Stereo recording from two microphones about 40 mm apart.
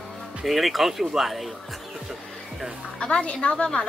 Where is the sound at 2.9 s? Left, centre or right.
Left.